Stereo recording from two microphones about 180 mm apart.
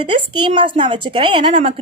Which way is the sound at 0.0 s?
30° right (ahead or behind).